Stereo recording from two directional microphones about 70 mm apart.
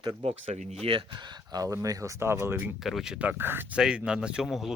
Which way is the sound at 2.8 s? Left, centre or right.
Centre.